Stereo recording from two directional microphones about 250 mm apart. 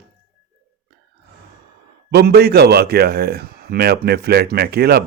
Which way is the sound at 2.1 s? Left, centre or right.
Right.